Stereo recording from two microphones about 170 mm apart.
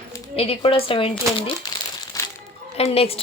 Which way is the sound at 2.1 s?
20° left (ahead or behind).